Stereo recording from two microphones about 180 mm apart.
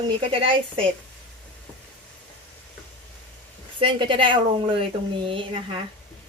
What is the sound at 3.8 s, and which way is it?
A woman's voice, 30° right (ahead or behind).